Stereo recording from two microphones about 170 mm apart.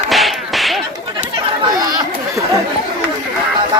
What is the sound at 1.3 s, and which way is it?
Chatter, 25° right (ahead or behind).